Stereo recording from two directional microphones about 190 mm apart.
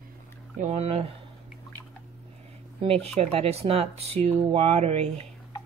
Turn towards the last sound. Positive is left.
turn(degrees=-35)  # may be behind; listen again after turning